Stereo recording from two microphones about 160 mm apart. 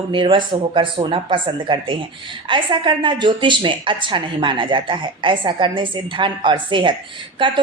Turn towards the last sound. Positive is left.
turn(degrees=-30)  # may be behind; listen again after turning